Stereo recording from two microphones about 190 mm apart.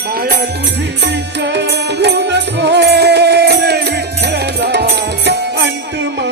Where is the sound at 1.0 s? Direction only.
65° right (ahead or behind).